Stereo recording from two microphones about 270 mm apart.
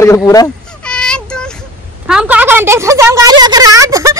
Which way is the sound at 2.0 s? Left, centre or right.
Centre.